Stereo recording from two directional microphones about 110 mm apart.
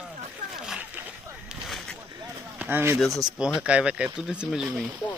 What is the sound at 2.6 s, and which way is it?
Speech, 20° right (ahead or behind).